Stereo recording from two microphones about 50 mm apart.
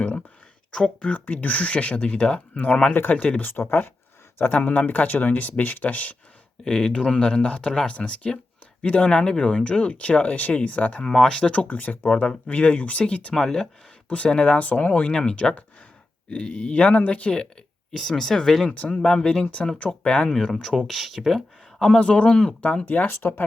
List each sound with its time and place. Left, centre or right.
0.7 s speech: centre
1.1 s speech: left
3.4 s speech: left
4.5 s speech: left
6.7 s speech: centre
11.0 s speech: centre
11.5 s speech: left
13.3 s speech: centre
14.1 s speech: left
17.9 s speech: centre; by 20.3 s left
20.5 s speech: centre
21.8 s speech: centre
23.0 s speech: left